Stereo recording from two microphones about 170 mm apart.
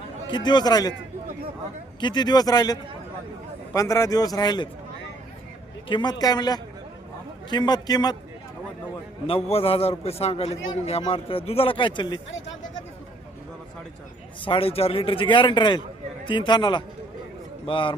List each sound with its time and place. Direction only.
0.3 s speech: 25° left (ahead or behind)
2.0 s speech: 25° left (ahead or behind)
5.9 s speech: 25° left (ahead or behind)
9.2 s a man's voice: 35° left (ahead or behind)
14.4 s a man's voice: 30° left (ahead or behind)